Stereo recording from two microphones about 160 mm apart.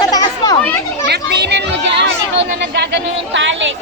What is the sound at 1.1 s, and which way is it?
Speech, 90° right.